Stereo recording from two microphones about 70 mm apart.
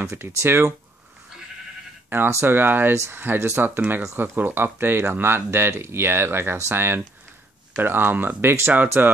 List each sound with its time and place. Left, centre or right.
0.0 s speech: right
2.0 s speech: right